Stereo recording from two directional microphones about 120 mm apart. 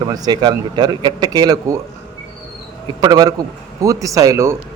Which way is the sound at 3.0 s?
35° right (ahead or behind).